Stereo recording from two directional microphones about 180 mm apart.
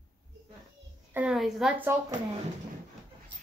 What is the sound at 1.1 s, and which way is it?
Speech, 5° right (ahead or behind).